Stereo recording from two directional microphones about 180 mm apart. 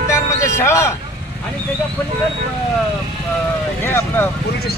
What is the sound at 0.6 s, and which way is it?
Speech, 15° left (ahead or behind).